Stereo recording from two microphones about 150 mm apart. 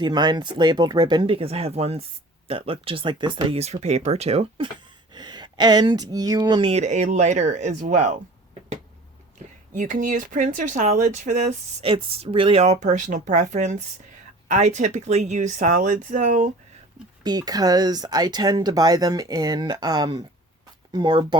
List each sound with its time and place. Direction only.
0.0 s speech: 30° right (ahead or behind)
6.7 s speech: 50° right (ahead or behind)
9.4 s a sound: 45° right (ahead or behind)
9.7 s speech: 60° right (ahead or behind)
17.2 s speech: 25° right (ahead or behind)